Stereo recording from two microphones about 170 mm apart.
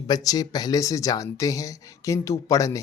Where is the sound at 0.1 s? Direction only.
20° left (ahead or behind).